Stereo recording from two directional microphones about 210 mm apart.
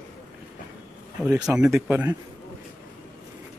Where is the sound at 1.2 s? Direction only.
5° right (ahead or behind).